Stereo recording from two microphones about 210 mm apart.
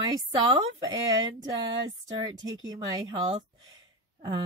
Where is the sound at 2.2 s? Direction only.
20° right (ahead or behind).